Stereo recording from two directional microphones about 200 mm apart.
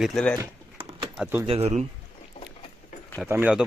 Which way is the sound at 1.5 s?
30° right (ahead or behind).